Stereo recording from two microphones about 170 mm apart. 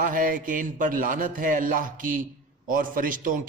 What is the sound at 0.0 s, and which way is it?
A man's voice, 55° right (ahead or behind).